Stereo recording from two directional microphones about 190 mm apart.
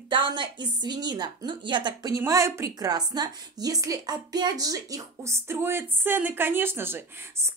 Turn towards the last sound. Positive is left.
turn(degrees=-10)  # may be behind; listen again after turning